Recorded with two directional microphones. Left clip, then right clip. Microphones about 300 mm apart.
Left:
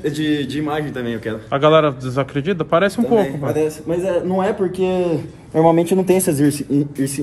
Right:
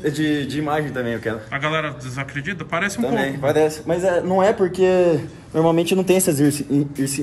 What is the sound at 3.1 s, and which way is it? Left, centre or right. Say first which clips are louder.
A man's voice: left 3 dB; centre.